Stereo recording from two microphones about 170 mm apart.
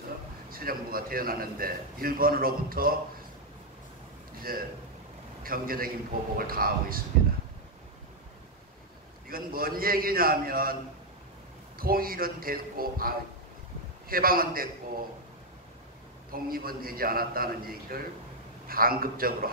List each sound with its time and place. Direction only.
0.5 s a man's voice: 60° right (ahead or behind)
4.4 s a man's voice: 60° right (ahead or behind)
9.3 s a man's voice: 60° right (ahead or behind)
11.8 s a man's voice: 60° right (ahead or behind)
16.3 s a man's voice: 60° right (ahead or behind)